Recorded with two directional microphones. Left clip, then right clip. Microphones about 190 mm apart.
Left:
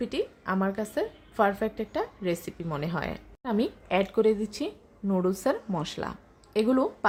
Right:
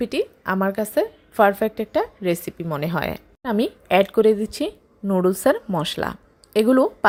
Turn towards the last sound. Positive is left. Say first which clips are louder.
# right 8 dB
turn(degrees=-30)  # may be behind; listen again after turning